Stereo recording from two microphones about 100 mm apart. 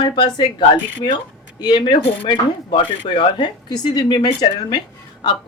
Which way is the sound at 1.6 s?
55° left (ahead or behind).